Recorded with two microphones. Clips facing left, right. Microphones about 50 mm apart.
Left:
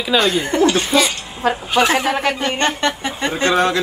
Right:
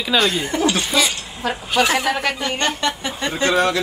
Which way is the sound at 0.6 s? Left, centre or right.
Left.